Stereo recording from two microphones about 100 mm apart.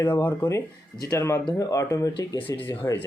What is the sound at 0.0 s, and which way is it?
Speech, 25° left (ahead or behind).